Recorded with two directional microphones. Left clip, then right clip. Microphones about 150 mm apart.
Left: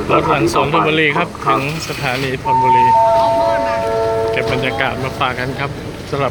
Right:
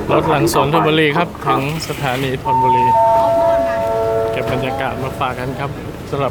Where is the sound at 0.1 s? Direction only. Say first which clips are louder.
Even; 25° right (ahead or behind).